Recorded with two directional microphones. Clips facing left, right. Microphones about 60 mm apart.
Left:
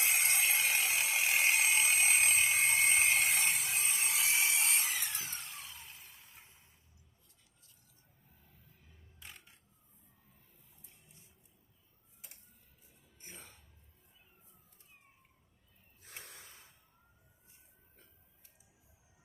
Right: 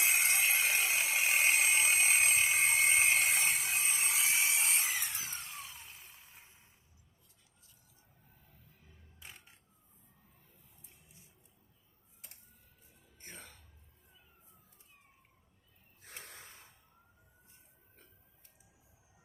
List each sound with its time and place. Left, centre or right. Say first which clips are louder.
0.1 s ratchet: right 1 dB; right
4.8 s tools: right 1 dB; right
5.2 s a sound: right 1 dB; right
13.1 s music: right 2 dB; right
16.0 s snort: right 1 dB; right